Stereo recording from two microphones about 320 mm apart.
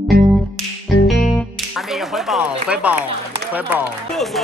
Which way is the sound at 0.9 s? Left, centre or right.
Left.